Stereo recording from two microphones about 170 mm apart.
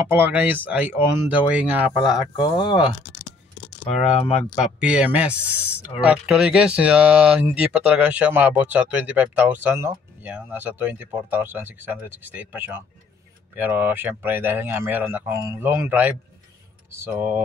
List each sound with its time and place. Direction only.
0.1 s speech: 10° right (ahead or behind)
2.3 s speech: 25° left (ahead or behind)
3.9 s speech: centre (ahead or behind)